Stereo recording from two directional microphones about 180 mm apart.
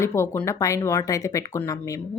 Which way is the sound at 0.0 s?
15° left (ahead or behind).